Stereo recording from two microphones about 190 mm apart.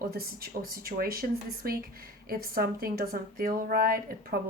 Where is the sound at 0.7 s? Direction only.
50° right (ahead or behind).